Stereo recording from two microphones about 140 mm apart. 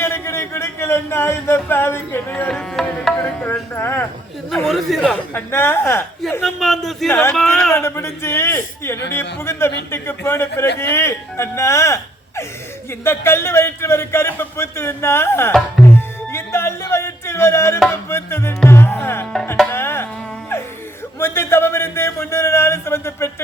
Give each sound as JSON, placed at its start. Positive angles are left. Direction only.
{"t": 0.0, "sound": "a sound", "side_deg": 15}
{"t": 3.0, "sound": "music", "side_deg": 5}
{"t": 3.8, "sound": "a sound", "side_deg": 15}
{"t": 4.5, "sound": "speech", "side_deg": 0}
{"t": 5.3, "sound": "a man's voice", "side_deg": 15}
{"t": 6.4, "sound": "speech", "side_deg": 0}
{"t": 7.1, "sound": "a man's voice", "side_deg": 15}
{"t": 13.1, "sound": "a man's voice", "side_deg": 20}
{"t": 15.9, "sound": "music", "side_deg": 15}
{"t": 21.2, "sound": "a sound", "side_deg": 15}